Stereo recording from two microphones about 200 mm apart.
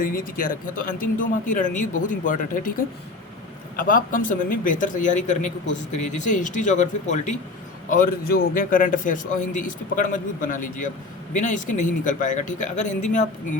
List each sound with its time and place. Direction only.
0.0 s speech: 45° left (ahead or behind)